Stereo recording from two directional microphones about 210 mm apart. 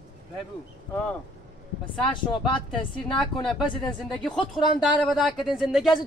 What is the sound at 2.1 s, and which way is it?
Speech, 20° left (ahead or behind).